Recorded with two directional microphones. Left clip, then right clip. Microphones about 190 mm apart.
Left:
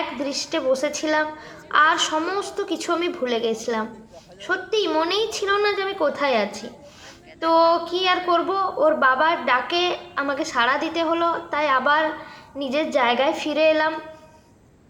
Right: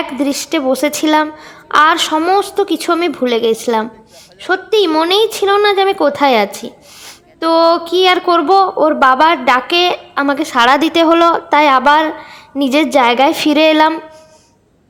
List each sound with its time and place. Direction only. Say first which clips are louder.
0.2 s a woman's voice: right 9 dB; 50° right (ahead or behind)